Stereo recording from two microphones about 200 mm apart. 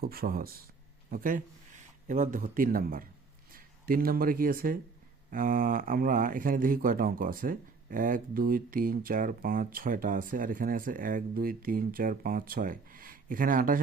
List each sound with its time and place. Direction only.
0.0 s speech: 50° right (ahead or behind)